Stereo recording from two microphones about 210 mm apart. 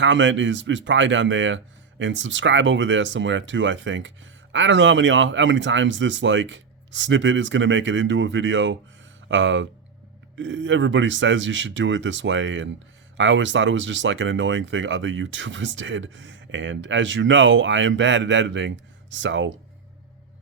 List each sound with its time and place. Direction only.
0.0 s speech: 60° right (ahead or behind)